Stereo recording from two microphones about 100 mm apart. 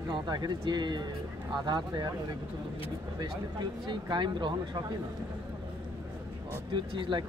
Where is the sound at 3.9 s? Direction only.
50° right (ahead or behind).